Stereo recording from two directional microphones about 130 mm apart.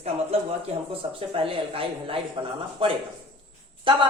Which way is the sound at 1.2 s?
45° right (ahead or behind).